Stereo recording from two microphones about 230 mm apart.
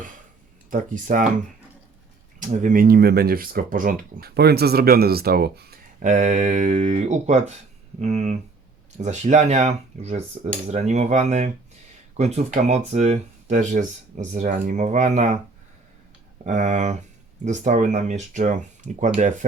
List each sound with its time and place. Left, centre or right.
0.7 s speech: right
2.5 s speech: right
16.5 s speech: right